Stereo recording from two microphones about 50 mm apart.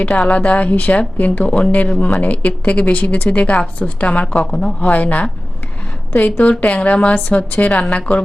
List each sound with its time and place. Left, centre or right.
0.3 s a woman's voice: left
4.3 s a woman's voice: centre
4.9 s a woman's voice: left